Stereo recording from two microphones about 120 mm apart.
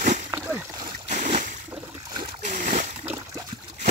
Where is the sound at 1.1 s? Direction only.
90° right.